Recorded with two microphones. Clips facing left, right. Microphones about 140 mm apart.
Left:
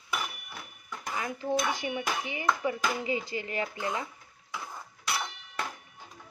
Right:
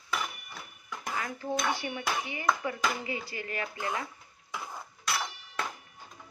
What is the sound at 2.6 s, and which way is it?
Speech, 20° left (ahead or behind).